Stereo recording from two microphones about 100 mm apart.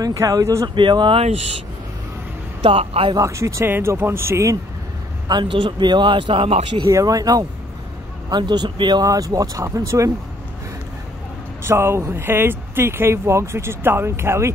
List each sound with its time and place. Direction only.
0.0 s speech: 35° right (ahead or behind)
0.7 s speech: 50° right (ahead or behind)
2.6 s speech: 80° right
3.2 s speech: 35° right (ahead or behind)
5.3 s speech: 55° right (ahead or behind)
6.9 s speech: 35° right (ahead or behind)
8.3 s speech: 45° right (ahead or behind)
9.0 s speech: 35° right (ahead or behind)
11.6 s speech: 25° right (ahead or behind)